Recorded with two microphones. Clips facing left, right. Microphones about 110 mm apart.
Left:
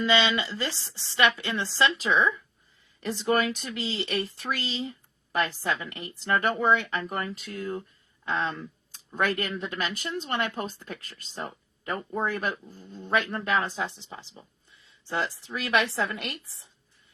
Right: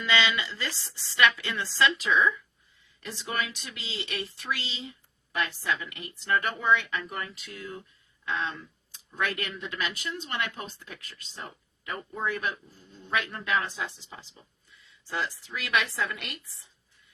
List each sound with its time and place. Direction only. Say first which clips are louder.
0.0 s speech: left 3 dB; 25° left (ahead or behind)